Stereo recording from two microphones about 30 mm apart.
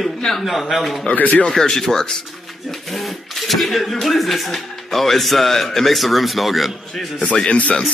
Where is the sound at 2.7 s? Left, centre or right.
Centre.